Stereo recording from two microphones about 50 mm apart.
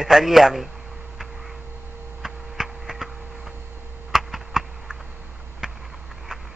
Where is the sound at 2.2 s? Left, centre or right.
Centre.